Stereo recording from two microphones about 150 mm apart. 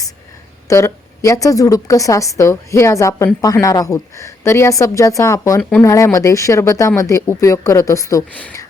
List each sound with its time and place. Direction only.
0.7 s a woman's voice: 20° left (ahead or behind)
8.3 s speech: 10° left (ahead or behind)